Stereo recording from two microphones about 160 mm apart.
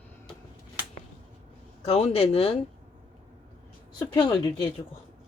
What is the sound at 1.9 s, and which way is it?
Speech, 40° left (ahead or behind).